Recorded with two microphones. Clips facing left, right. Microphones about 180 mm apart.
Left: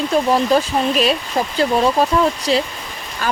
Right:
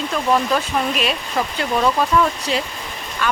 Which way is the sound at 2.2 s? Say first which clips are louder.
Left 3 dB; 35° left (ahead or behind).